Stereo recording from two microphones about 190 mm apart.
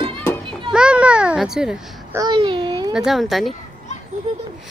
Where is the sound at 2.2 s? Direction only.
25° right (ahead or behind).